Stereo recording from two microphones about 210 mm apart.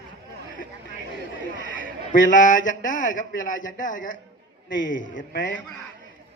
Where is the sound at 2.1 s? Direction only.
40° left (ahead or behind).